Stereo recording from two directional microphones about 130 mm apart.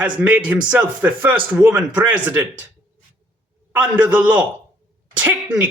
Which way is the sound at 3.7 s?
10° right (ahead or behind).